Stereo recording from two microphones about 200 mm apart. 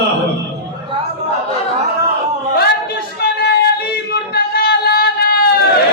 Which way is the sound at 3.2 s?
55° left (ahead or behind).